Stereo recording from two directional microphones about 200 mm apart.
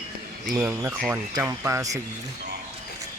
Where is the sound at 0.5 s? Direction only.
10° right (ahead or behind).